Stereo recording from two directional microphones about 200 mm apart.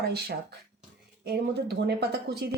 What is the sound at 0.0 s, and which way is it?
A woman's voice, 55° right (ahead or behind).